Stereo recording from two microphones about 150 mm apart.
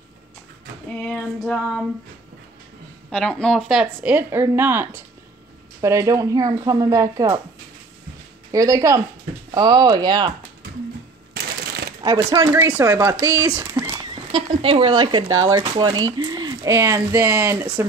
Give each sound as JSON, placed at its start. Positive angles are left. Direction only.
{"t": 1.0, "sound": "female singing", "side_deg": 5}
{"t": 3.1, "sound": "speech", "side_deg": 5}
{"t": 8.5, "sound": "speech", "side_deg": -20}
{"t": 11.3, "sound": "shuffling cards", "side_deg": -90}
{"t": 12.0, "sound": "speech", "side_deg": -20}